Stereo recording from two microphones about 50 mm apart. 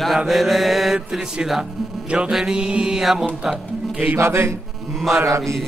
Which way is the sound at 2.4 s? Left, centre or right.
Centre.